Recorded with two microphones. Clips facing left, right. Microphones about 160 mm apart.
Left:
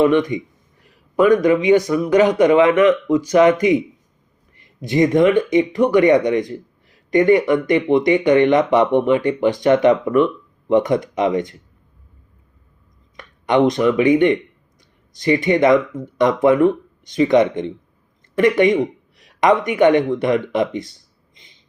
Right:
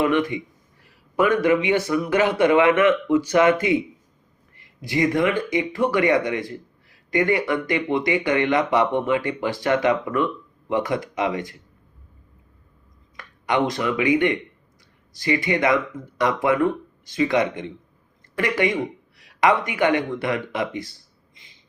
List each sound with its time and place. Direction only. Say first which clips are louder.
0.0 s speech: left 6 dB; 20° left (ahead or behind)
0.8 s a sound: left 5 dB; 20° left (ahead or behind)
1.7 s speech: left 7 dB; 15° left (ahead or behind)
13.1 s speech: left 6 dB; 20° left (ahead or behind)
15.1 s speech: left 6 dB; 20° left (ahead or behind)